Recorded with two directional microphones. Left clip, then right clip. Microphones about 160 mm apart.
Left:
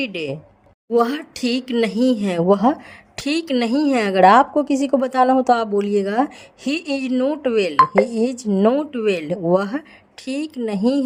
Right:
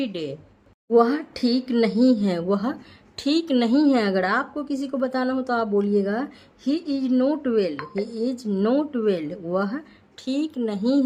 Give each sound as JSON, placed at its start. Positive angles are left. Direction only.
{"t": 0.0, "sound": "a woman's voice", "side_deg": 35}
{"t": 0.9, "sound": "a woman's voice", "side_deg": 45}
{"t": 7.1, "sound": "a woman's voice", "side_deg": 30}
{"t": 8.4, "sound": "a woman's voice", "side_deg": 25}